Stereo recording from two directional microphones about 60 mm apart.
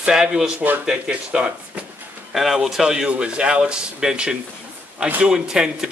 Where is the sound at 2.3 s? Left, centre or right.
Centre.